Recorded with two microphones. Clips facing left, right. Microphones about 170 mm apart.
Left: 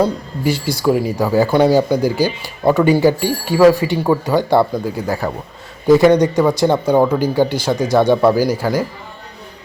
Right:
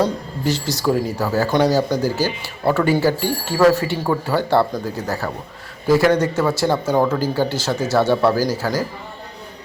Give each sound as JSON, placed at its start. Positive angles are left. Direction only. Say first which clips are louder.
{"t": 0.4, "sound": "speech", "louder": "left 4 dB", "side_deg": 10}